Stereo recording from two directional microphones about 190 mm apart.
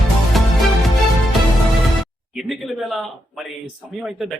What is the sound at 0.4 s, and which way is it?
Music, centre (ahead or behind).